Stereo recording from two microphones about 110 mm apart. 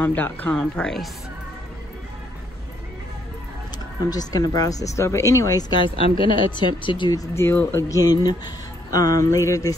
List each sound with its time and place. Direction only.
0.0 s speech: 15° left (ahead or behind)
4.1 s speech: 35° left (ahead or behind)
5.9 s speech: 50° left (ahead or behind)
7.3 s speech: 20° left (ahead or behind)
8.0 s speech: 35° left (ahead or behind)